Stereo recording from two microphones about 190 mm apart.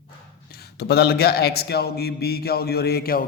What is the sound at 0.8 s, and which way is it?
A man's voice, 55° left (ahead or behind).